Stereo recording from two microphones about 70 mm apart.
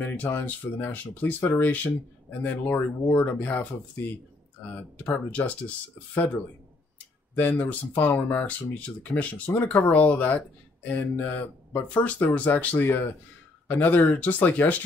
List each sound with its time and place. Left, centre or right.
0.0 s speech: left
4.9 s speech: left